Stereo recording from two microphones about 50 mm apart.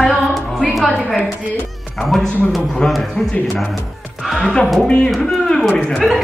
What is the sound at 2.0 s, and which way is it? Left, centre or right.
A man's voice, centre.